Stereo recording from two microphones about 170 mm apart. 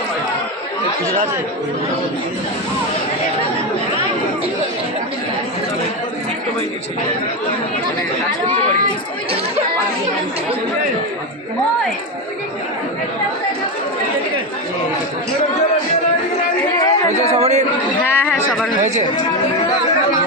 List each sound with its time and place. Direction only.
16.7 s a sound: 20° left (ahead or behind)
17.3 s speech: 40° right (ahead or behind)
18.0 s speech: 10° left (ahead or behind)